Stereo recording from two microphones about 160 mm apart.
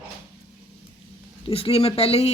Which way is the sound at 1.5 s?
35° left (ahead or behind).